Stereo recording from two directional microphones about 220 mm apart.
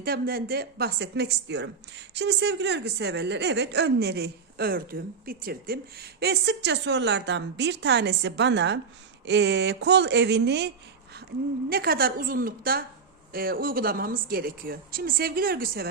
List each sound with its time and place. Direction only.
0.0 s a woman's voice: 45° right (ahead or behind)
11.7 s a woman's voice: 45° right (ahead or behind)